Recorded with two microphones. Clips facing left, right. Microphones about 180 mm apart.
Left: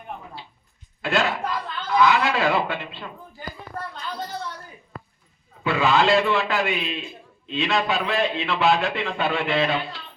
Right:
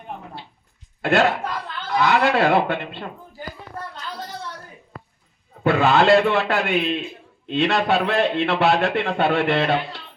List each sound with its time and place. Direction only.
1.0 s a man's voice: 55° right (ahead or behind)
5.6 s a man's voice: 55° right (ahead or behind)